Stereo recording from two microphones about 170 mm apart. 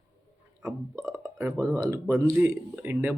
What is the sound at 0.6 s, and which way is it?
Speech, 20° right (ahead or behind).